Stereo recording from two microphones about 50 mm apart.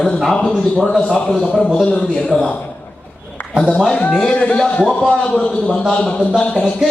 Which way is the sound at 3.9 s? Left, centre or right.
Left.